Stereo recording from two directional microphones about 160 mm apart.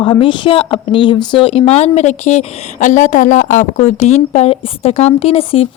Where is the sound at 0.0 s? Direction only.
30° left (ahead or behind).